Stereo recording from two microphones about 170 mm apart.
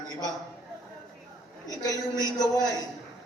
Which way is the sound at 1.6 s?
20° left (ahead or behind).